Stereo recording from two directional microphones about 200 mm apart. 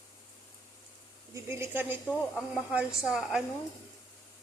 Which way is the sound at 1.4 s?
15° right (ahead or behind).